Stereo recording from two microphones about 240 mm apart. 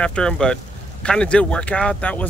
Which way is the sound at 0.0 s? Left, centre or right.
Centre.